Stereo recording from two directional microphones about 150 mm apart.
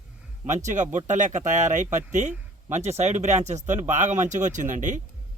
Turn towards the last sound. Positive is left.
turn(degrees=-55)  # may be behind; listen again after turning